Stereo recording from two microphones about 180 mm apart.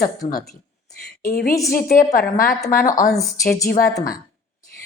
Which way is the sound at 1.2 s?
55° left (ahead or behind).